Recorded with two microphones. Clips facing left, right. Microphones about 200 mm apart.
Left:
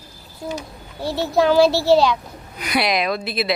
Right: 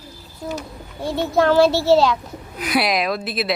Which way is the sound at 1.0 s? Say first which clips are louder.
Even; 5° left (ahead or behind).